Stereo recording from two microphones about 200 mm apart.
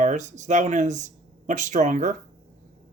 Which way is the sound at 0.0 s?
35° right (ahead or behind).